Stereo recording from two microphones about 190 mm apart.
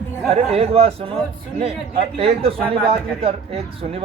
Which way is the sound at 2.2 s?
30° right (ahead or behind).